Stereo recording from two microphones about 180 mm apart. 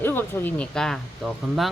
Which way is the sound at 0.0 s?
10° left (ahead or behind).